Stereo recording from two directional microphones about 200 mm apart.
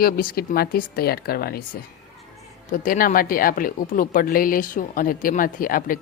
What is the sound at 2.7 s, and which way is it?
Speech, 45° left (ahead or behind).